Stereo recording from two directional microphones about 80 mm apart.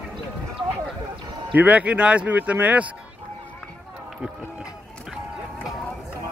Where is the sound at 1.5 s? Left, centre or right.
Centre.